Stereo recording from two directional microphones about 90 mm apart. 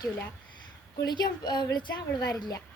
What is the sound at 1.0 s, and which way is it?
A woman's voice, 50° left (ahead or behind).